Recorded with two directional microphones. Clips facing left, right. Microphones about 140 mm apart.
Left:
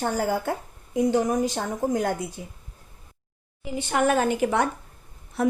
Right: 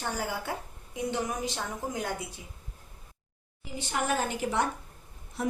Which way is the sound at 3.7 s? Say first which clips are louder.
Left 8 dB; 60° left (ahead or behind).